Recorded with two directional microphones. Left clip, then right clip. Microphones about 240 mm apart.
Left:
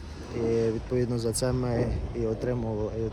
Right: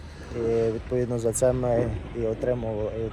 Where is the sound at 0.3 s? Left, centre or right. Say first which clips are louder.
Right 2 dB; left.